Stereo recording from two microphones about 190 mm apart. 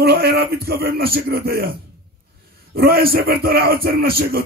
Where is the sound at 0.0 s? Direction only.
55° right (ahead or behind).